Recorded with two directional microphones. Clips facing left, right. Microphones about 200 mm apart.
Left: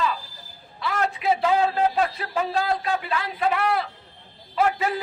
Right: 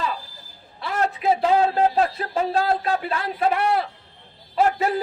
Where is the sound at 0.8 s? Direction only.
40° right (ahead or behind).